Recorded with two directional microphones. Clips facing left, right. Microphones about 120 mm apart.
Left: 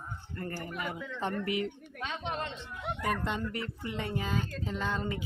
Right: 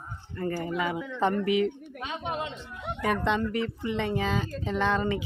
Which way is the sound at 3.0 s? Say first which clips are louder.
Right 7 dB; 90° right.